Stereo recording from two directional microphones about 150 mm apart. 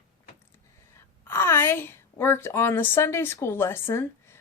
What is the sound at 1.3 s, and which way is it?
Speech, 15° left (ahead or behind).